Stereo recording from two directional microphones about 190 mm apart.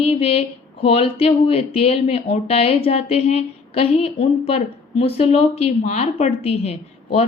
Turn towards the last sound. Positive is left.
turn(degrees=35)  # may be behind; listen again after turning